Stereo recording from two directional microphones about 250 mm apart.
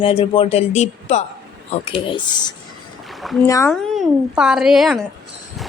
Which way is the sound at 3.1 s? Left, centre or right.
Centre.